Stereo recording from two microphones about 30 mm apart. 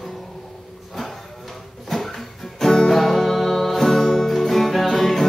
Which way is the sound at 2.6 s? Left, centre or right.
Centre.